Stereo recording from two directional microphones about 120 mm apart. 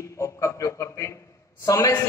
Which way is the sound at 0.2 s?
25° left (ahead or behind).